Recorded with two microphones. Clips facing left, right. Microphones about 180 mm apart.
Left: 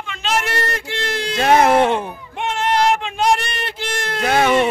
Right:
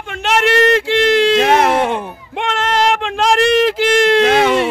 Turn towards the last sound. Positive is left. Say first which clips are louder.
# right 8 dB
turn(degrees=-90)